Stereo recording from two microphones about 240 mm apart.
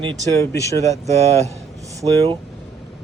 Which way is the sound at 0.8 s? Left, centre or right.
Centre.